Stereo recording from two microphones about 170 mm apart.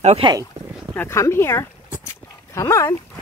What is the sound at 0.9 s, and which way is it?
Speech, 15° left (ahead or behind).